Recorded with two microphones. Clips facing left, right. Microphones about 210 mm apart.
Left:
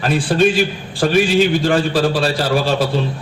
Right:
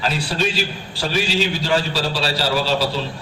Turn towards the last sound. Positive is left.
turn(degrees=50)  # may be behind; listen again after turning